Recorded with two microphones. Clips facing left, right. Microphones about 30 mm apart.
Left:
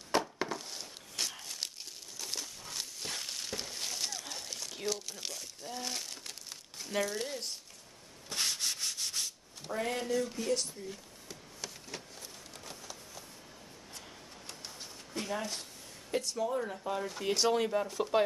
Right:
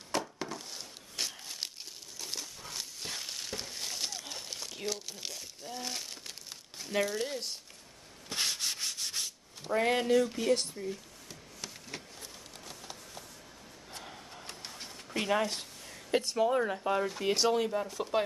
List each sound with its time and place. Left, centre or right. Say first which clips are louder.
0.1 s a sound: left 3 dB; centre
0.7 s a sound: even; centre
1.4 s crumpling: even; centre
2.1 s a sound: even; centre
4.7 s speech: left 1 dB; centre
8.3 s sanding: right 1 dB; centre
9.7 s speech: right 6 dB; right
11.6 s printer: right 1 dB; centre
13.9 s printer: right 5 dB; right
14.8 s a sound: right 5 dB; right
16.1 s speech: right 5 dB; right
17.4 s speech: left 1 dB; centre